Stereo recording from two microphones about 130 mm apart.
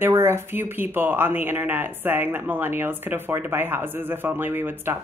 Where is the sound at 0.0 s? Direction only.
20° right (ahead or behind).